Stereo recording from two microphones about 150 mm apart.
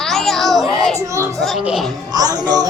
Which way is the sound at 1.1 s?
20° right (ahead or behind).